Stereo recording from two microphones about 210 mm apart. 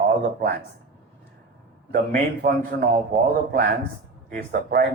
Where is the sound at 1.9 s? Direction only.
45° right (ahead or behind).